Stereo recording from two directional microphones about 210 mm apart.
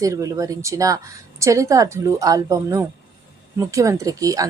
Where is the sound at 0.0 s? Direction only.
15° right (ahead or behind).